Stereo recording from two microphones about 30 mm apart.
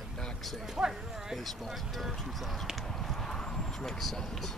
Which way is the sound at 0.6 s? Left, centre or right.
Centre.